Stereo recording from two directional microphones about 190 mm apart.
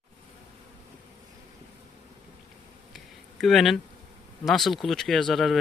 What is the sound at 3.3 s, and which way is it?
Speech, centre (ahead or behind).